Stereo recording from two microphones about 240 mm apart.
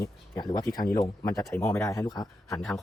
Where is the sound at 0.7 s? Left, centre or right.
Left.